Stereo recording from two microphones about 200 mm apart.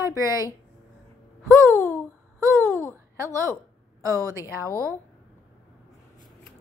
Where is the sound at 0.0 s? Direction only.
15° right (ahead or behind).